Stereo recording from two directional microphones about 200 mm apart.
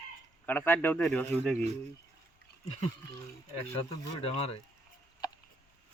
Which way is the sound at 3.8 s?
30° left (ahead or behind).